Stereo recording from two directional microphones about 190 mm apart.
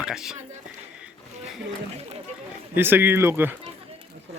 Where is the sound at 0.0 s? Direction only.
5° right (ahead or behind).